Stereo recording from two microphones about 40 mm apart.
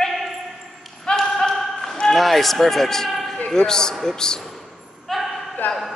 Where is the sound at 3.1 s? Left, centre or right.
Centre.